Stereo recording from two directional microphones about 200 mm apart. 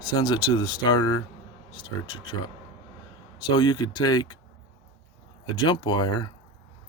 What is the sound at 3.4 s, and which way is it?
Speech, 20° left (ahead or behind).